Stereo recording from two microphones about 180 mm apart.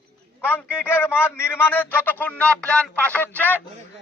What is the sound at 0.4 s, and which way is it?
A man's voice, 10° left (ahead or behind).